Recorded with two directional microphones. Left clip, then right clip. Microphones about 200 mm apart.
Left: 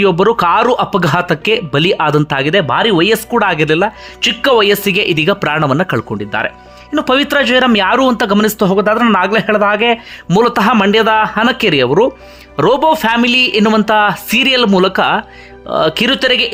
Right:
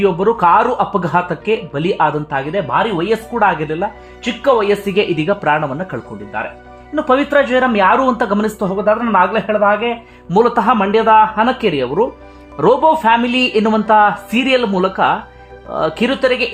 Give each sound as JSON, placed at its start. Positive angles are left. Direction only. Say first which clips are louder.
{"t": 0.0, "sound": "speech", "louder": "left 2 dB", "side_deg": 25}
{"t": 6.9, "sound": "speech", "louder": "left 1 dB", "side_deg": 20}